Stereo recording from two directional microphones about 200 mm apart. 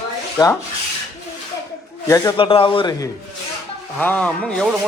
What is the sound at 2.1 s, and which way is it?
A man's voice, 20° left (ahead or behind).